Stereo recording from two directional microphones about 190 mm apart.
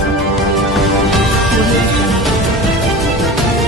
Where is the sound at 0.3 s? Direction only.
Centre (ahead or behind).